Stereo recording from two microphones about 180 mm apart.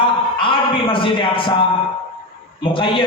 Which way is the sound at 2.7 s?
30° left (ahead or behind).